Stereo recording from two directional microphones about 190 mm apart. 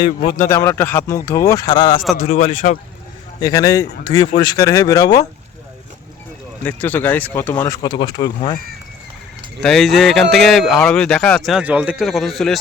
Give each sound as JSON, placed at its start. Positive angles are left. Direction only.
{"t": 0.0, "sound": "speech", "side_deg": 25}
{"t": 2.1, "sound": "a man's voice", "side_deg": 40}
{"t": 3.4, "sound": "speech", "side_deg": 15}
{"t": 6.7, "sound": "speech", "side_deg": 10}
{"t": 9.6, "sound": "a man's voice", "side_deg": 0}